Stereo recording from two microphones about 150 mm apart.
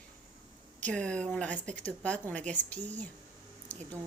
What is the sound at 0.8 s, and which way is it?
A woman's voice, 5° left (ahead or behind).